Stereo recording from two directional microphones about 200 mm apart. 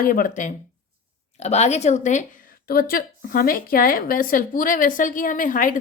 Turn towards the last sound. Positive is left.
turn(degrees=40)  # may be behind; listen again after turning